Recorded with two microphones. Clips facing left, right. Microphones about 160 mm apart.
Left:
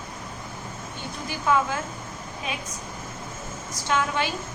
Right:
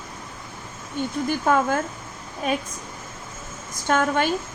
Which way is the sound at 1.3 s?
50° right (ahead or behind).